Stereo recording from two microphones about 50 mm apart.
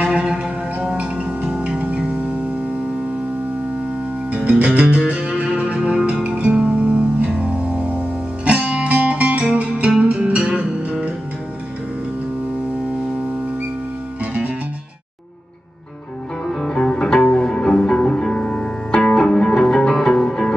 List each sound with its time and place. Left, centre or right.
0.0 s music: right
4.6 s music: right
8.5 s music: right
16.4 s music: centre